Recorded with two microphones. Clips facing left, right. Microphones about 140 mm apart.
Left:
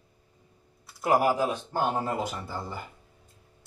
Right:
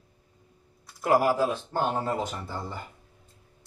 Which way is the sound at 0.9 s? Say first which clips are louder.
Right 1 dB; 20° left (ahead or behind).